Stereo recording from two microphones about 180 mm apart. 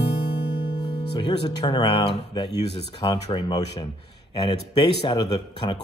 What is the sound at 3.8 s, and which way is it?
Speech, 25° left (ahead or behind).